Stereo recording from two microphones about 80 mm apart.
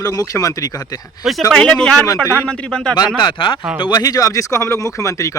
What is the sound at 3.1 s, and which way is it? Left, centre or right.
Speech, left.